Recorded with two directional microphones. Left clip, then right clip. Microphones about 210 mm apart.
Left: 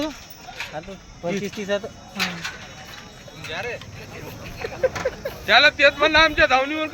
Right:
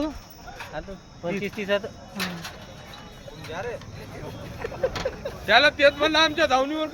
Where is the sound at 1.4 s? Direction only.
30° left (ahead or behind).